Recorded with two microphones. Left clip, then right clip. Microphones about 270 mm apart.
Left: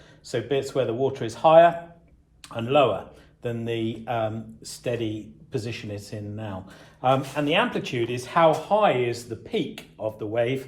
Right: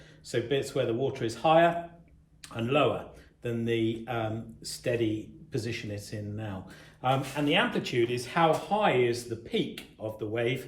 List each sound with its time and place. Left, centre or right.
0.3 s speech: centre